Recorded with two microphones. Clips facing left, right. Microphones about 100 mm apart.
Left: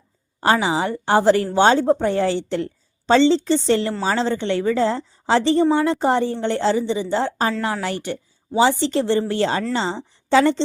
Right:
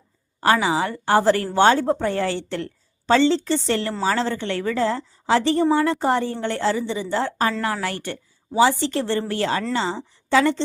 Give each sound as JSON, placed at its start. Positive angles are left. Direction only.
{"t": 0.4, "sound": "a woman's voice", "side_deg": 20}